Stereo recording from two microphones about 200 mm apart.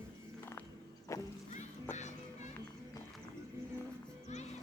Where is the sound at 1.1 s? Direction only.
15° left (ahead or behind).